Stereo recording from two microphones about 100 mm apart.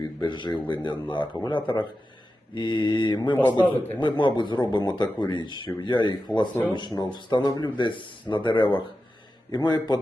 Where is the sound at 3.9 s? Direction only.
50° left (ahead or behind).